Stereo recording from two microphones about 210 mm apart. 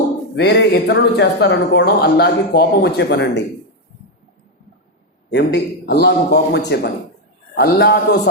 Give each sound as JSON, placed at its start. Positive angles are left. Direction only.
{"t": 0.3, "sound": "speech", "side_deg": 50}
{"t": 5.3, "sound": "a man's voice", "side_deg": 55}